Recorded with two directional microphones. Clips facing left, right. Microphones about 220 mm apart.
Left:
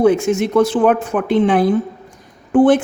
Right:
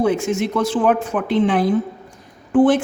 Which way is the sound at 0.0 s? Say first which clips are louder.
Left 5 dB; 50° left (ahead or behind).